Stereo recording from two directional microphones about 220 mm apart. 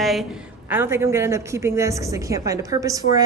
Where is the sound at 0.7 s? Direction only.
10° right (ahead or behind).